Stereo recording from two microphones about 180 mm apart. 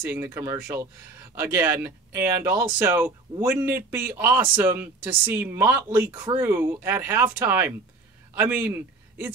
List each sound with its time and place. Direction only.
0.0 s speech: 10° right (ahead or behind)